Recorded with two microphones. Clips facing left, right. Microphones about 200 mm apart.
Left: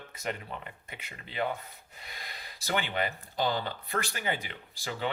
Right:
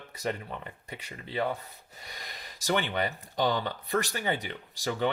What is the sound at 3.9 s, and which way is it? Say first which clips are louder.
Speech: right 4 dB; 40° right (ahead or behind).